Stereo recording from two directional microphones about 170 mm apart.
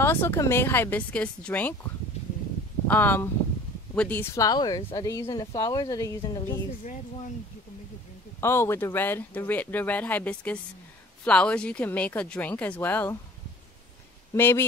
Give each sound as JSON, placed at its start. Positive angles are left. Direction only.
{"t": 0.0, "sound": "speech", "side_deg": 15}
{"t": 2.9, "sound": "speech", "side_deg": 10}
{"t": 8.4, "sound": "speech", "side_deg": 15}
{"t": 14.3, "sound": "speech", "side_deg": 15}